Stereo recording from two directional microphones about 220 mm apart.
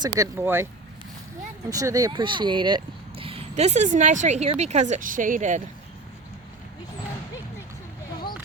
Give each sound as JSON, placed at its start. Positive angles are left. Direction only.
{"t": 0.2, "sound": "speech", "side_deg": -10}
{"t": 1.7, "sound": "speech", "side_deg": -15}